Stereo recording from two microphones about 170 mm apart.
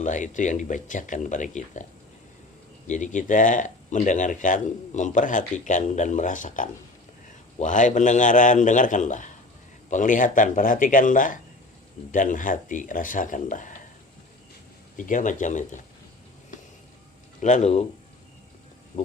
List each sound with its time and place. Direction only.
0.0 s speech: 50° left (ahead or behind)
2.8 s speech: 45° left (ahead or behind)
14.9 s speech: 50° left (ahead or behind)
17.4 s speech: 45° left (ahead or behind)